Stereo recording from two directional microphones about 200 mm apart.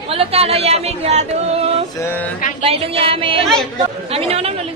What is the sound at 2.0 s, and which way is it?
Speech, 10° left (ahead or behind).